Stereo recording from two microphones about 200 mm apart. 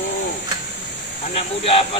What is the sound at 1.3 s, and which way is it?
Speech, 30° left (ahead or behind).